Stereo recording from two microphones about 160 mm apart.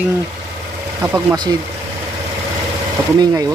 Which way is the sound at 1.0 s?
15° right (ahead or behind).